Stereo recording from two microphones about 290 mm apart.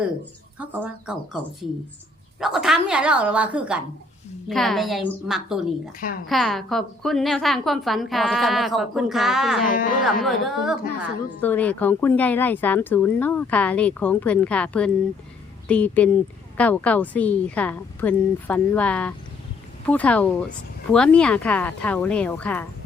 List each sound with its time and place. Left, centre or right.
0.6 s a woman's voice: centre
2.4 s a woman's voice: centre
9.6 s speech: left
10.2 s a woman's voice: centre